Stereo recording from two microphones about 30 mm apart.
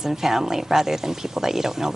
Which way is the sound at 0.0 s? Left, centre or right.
Centre.